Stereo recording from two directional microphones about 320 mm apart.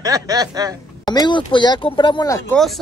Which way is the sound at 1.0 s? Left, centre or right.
Centre.